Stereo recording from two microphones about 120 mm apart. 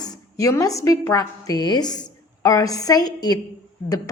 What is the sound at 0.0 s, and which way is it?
A woman's voice, 25° left (ahead or behind).